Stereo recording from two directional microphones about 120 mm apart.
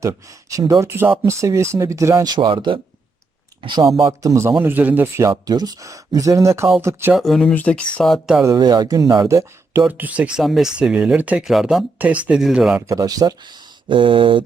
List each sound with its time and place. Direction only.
0.0 s speech: 25° right (ahead or behind)
2.3 s speech: 40° right (ahead or behind)
4.0 s speech: 30° right (ahead or behind)
7.1 s speech: centre (ahead or behind)
7.4 s speech: 10° left (ahead or behind)
8.5 s speech: 35° right (ahead or behind)
9.8 s speech: 10° right (ahead or behind)
12.9 s speech: 30° right (ahead or behind); by 14.4 s 45° right (ahead or behind)